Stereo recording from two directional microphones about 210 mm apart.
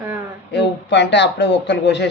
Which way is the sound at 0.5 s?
55° left (ahead or behind).